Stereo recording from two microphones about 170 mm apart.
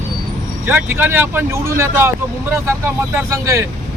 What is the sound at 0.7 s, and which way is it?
Speech, 15° right (ahead or behind).